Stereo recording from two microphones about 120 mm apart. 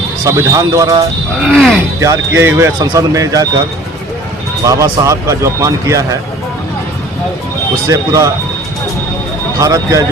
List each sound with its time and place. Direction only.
0.3 s speech: 30° right (ahead or behind)
1.5 s speech: centre (ahead or behind)
2.0 s speech: 25° right (ahead or behind)
2.7 s speech: 40° right (ahead or behind)
3.1 s speech: 30° right (ahead or behind)
4.6 s speech: 30° right (ahead or behind)
7.9 s speech: 30° right (ahead or behind)
9.6 s speech: 30° right (ahead or behind)